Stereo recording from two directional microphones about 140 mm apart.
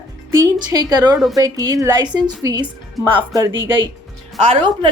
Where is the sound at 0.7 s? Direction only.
25° right (ahead or behind).